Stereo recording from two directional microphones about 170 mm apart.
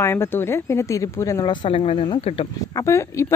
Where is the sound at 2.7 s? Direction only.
15° left (ahead or behind).